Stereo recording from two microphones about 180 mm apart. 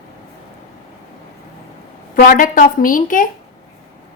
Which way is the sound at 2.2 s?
50° left (ahead or behind).